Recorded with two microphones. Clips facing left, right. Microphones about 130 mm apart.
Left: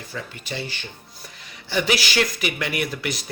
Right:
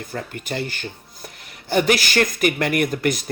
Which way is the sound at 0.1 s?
50° right (ahead or behind).